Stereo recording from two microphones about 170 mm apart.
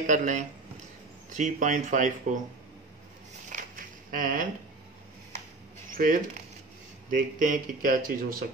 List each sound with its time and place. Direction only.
0.0 s speech: 50° right (ahead or behind)
3.4 s a sound: 50° right (ahead or behind)
5.9 s speech: 55° right (ahead or behind)